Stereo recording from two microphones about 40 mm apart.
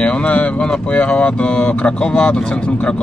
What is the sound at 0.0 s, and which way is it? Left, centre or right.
Speech, left.